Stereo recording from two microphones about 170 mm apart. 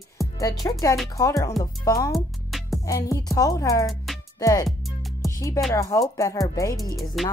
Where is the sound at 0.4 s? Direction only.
20° left (ahead or behind).